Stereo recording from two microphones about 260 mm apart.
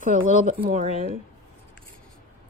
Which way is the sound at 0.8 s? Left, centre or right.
Left.